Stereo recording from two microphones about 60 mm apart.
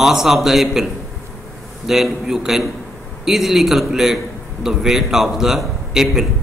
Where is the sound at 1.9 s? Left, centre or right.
Centre.